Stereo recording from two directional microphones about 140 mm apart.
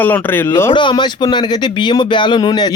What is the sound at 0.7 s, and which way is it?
A man's voice, 35° left (ahead or behind).